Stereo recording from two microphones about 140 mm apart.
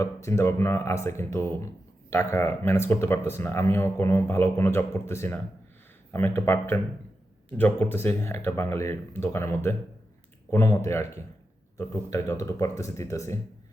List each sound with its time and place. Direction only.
0.0 s speech: 20° left (ahead or behind)